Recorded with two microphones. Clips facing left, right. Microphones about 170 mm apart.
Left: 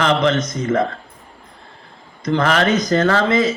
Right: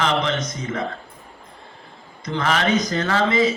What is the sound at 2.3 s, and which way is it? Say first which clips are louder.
Speech: left 4 dB; 55° left (ahead or behind).